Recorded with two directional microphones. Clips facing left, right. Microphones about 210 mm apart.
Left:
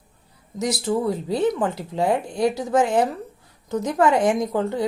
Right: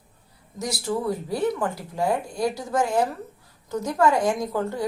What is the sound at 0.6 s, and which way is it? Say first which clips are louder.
A woman's voice: left 4 dB; 20° left (ahead or behind).